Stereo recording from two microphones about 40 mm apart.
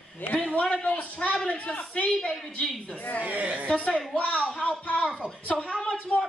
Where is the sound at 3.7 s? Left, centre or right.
Left.